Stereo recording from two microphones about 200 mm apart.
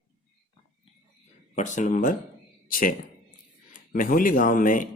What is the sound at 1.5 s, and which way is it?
Speech, 40° left (ahead or behind).